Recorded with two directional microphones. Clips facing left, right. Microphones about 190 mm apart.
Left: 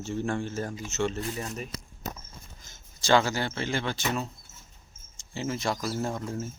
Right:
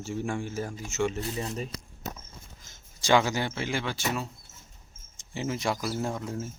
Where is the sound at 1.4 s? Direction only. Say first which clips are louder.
Right 2 dB; 30° right (ahead or behind).